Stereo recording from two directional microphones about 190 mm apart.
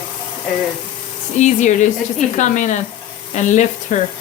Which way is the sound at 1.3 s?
40° left (ahead or behind).